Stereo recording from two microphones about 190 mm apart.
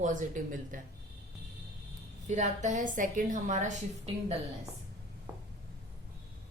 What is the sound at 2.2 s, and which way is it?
A woman's voice, 40° right (ahead or behind).